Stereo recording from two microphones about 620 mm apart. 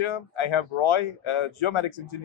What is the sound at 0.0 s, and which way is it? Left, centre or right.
Speech, left.